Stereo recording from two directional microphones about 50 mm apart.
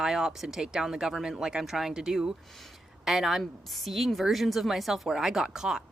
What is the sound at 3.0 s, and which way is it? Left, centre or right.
A woman's voice, centre.